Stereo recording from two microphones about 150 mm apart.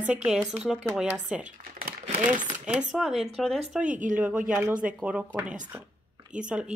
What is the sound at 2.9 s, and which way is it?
Speech, centre (ahead or behind).